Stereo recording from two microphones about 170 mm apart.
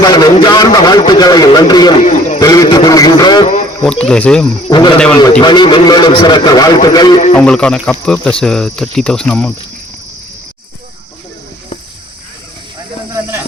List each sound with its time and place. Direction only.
0.0 s a man's voice: 25° left (ahead or behind)
2.0 s a man's voice: 45° left (ahead or behind)
2.4 s a man's voice: 20° left (ahead or behind)
3.8 s speech: 5° left (ahead or behind)
4.7 s a man's voice: 25° left (ahead or behind)
7.3 s speech: 5° left (ahead or behind)